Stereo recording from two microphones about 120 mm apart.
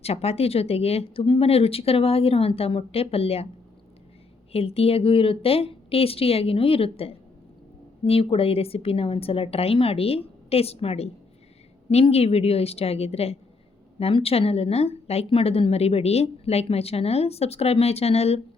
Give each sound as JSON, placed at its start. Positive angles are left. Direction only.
{"t": 0.0, "sound": "a woman's voice", "side_deg": 60}
{"t": 4.5, "sound": "a woman's voice", "side_deg": 55}